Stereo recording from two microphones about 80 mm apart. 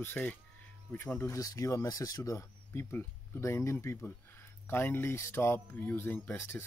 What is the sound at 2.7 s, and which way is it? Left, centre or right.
A man's voice, left.